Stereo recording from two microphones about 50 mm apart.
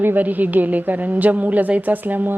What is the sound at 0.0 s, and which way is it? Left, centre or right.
A woman's voice, right.